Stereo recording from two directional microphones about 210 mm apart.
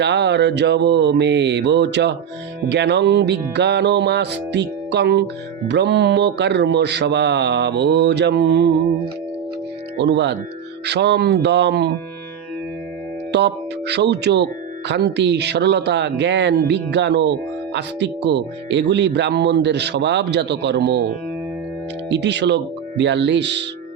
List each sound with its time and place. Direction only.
0.0 s speech: 55° right (ahead or behind)
10.0 s speech: 55° right (ahead or behind)
13.3 s speech: 55° right (ahead or behind)
22.1 s speech: 55° right (ahead or behind)